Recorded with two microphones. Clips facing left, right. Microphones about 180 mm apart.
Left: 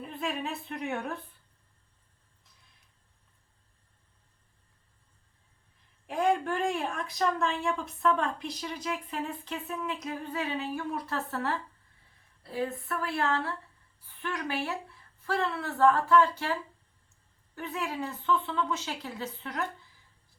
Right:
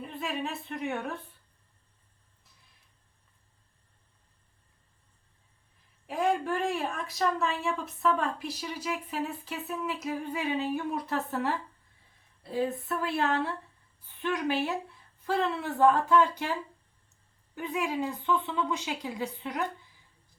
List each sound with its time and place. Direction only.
0.0 s speech: centre (ahead or behind)
6.1 s a woman's voice: centre (ahead or behind)